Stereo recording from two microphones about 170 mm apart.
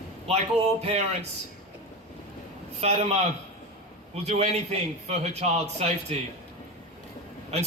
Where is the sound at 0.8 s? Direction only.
40° right (ahead or behind).